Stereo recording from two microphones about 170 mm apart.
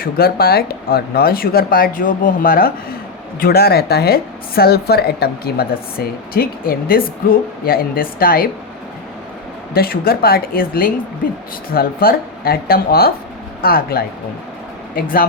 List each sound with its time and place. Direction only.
0.0 s a woman's voice: 65° left (ahead or behind)
9.7 s a woman's voice: 60° left (ahead or behind)